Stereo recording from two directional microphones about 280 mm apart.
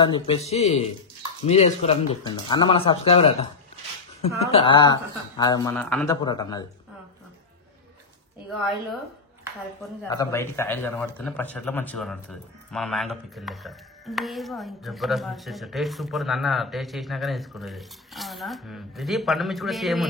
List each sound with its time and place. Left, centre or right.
0.0 s speech: centre
4.5 s a man's voice: centre
6.2 s a man's voice: centre
10.0 s speech: centre